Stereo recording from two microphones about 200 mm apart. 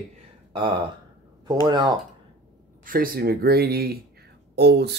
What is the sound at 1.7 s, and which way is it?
Speech, 20° right (ahead or behind).